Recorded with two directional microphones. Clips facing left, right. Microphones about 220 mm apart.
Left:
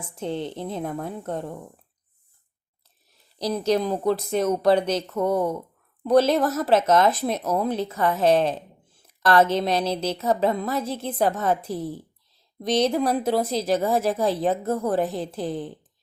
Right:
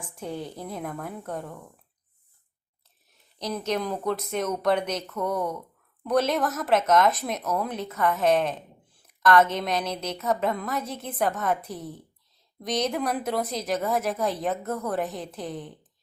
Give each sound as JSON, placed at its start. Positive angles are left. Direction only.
{"t": 0.0, "sound": "a woman's voice", "side_deg": 25}
{"t": 3.1, "sound": "a woman's voice", "side_deg": 35}